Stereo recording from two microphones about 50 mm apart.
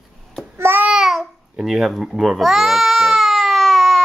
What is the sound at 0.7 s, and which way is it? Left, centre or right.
Babbling, right.